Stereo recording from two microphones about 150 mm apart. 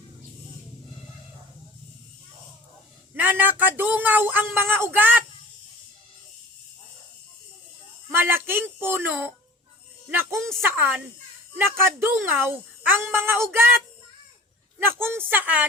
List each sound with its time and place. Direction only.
3.2 s a child's voice: 10° right (ahead or behind)
8.1 s a child's voice: 15° right (ahead or behind)
14.8 s a child's voice: 15° right (ahead or behind)